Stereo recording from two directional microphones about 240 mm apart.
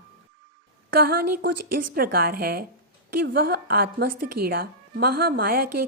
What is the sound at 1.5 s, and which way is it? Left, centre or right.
Speech, right.